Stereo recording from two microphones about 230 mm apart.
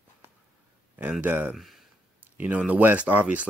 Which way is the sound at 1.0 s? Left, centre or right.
Centre.